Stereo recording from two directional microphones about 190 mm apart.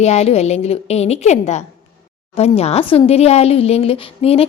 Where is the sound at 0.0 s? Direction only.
35° left (ahead or behind).